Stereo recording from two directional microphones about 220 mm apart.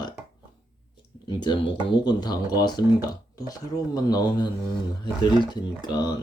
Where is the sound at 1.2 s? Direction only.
20° left (ahead or behind).